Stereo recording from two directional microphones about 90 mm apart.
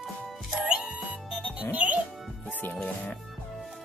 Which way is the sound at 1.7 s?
15° right (ahead or behind).